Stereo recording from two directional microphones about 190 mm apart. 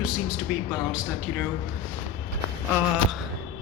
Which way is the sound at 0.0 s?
5° right (ahead or behind).